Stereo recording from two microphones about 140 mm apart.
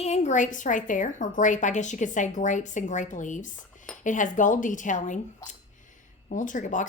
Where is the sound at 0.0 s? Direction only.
55° left (ahead or behind).